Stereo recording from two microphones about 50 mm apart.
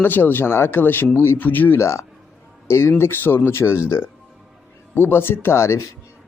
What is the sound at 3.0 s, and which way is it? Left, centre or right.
Speech, left.